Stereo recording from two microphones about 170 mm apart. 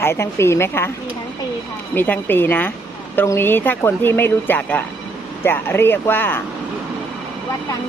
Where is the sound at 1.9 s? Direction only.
10° left (ahead or behind).